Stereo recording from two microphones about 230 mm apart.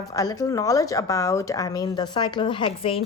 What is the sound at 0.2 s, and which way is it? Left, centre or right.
Speech, centre.